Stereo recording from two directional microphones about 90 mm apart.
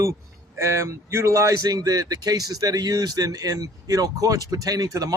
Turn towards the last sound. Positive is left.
turn(degrees=-40)  # may be behind; listen again after turning